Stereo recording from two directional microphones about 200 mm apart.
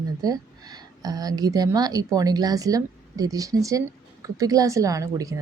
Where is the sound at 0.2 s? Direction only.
20° right (ahead or behind).